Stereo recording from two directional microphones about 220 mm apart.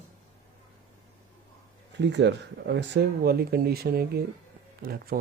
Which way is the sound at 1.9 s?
55° right (ahead or behind).